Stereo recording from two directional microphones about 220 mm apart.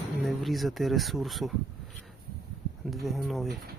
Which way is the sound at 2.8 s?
Centre (ahead or behind).